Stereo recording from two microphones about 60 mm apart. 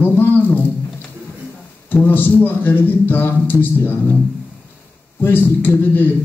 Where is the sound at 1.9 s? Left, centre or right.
Left.